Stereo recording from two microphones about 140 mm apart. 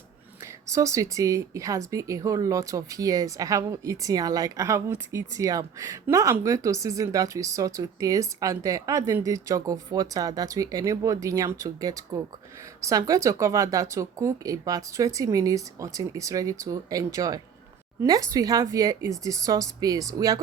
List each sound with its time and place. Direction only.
0.4 s speech: 20° right (ahead or behind)